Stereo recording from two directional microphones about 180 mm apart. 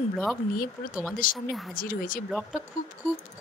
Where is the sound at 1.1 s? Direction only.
50° left (ahead or behind).